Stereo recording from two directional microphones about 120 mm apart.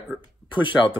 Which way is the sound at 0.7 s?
5° left (ahead or behind).